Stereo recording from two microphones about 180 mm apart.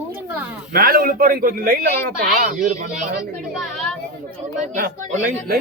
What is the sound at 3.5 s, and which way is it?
Speech, 5° left (ahead or behind).